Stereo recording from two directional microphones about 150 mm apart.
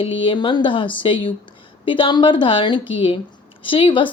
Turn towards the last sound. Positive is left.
turn(degrees=35)  # may be behind; listen again after turning